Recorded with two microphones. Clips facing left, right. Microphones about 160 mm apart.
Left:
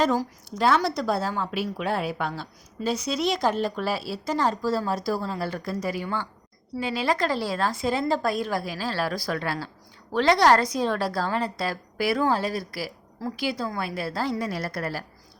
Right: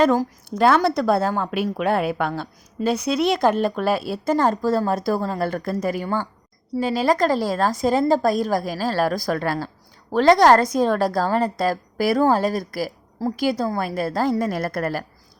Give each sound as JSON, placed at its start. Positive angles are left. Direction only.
{"t": 0.0, "sound": "a woman's voice", "side_deg": -55}